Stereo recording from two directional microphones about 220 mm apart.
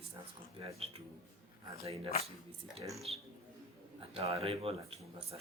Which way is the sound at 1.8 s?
25° right (ahead or behind).